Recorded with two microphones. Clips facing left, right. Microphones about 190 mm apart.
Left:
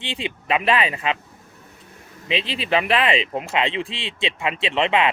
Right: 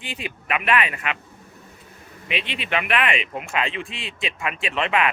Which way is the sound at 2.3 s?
30° left (ahead or behind).